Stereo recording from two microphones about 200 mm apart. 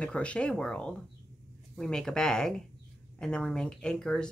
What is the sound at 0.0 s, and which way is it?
Speech, 5° left (ahead or behind).